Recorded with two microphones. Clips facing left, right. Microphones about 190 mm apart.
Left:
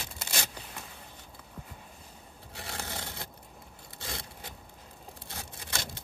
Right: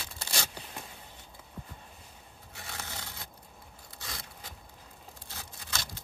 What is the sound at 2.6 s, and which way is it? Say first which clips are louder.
Crushing: left 4 dB; 25° left (ahead or behind).